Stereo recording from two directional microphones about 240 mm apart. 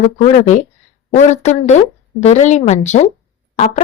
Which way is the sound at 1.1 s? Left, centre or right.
Left.